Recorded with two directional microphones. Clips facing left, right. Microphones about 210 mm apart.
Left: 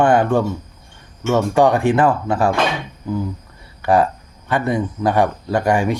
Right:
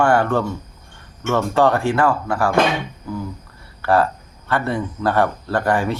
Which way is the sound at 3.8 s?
15° left (ahead or behind).